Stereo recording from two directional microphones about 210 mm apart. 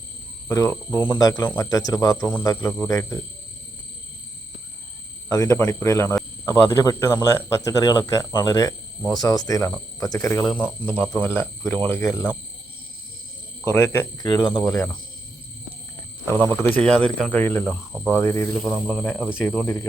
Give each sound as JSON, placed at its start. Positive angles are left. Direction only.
{"t": 0.4, "sound": "speech", "side_deg": 10}
{"t": 5.3, "sound": "speech", "side_deg": 15}
{"t": 13.7, "sound": "speech", "side_deg": 10}
{"t": 14.4, "sound": "speech", "side_deg": 0}
{"t": 16.2, "sound": "speech", "side_deg": 10}
{"t": 18.5, "sound": "speech", "side_deg": 0}
{"t": 19.4, "sound": "speech", "side_deg": 10}